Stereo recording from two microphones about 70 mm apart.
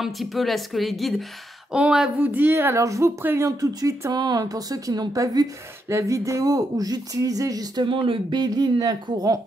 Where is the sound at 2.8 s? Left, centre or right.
Right.